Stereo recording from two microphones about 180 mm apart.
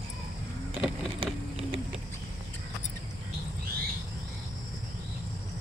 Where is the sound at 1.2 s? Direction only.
30° right (ahead or behind).